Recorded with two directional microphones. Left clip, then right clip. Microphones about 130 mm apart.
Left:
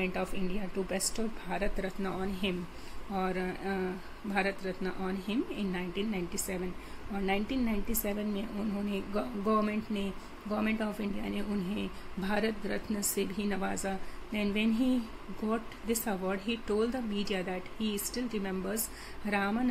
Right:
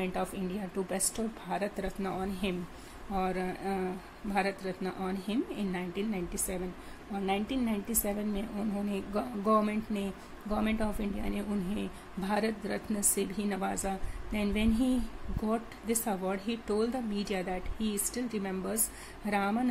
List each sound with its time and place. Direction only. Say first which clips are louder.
0.0 s a woman's voice: even; 15° right (ahead or behind)
6.3 s a woman's voice: even; centre (ahead or behind); by 19.7 s 20° right (ahead or behind)